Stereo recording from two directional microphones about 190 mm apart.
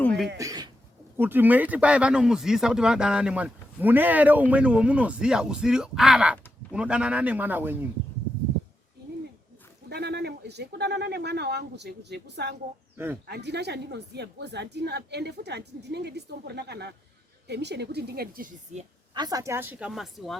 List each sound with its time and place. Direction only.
0.0 s a sound: 5° left (ahead or behind)
0.3 s a sound: 20° right (ahead or behind)
1.1 s speech: 10° right (ahead or behind)
9.9 s a woman's voice: 60° right (ahead or behind); by 18.9 s 40° right (ahead or behind)
19.1 s speech: 20° right (ahead or behind)
19.9 s speech: centre (ahead or behind)